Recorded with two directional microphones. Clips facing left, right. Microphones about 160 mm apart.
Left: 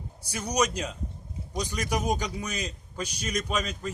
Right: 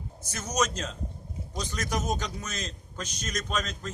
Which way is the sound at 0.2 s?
10° left (ahead or behind).